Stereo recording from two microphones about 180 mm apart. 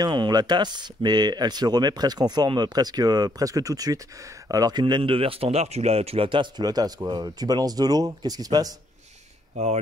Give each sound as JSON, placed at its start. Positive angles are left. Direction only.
{"t": 0.0, "sound": "speech", "side_deg": -25}